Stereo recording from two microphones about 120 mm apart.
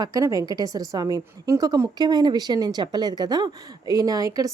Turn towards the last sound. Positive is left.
turn(degrees=-30)  # may be behind; listen again after turning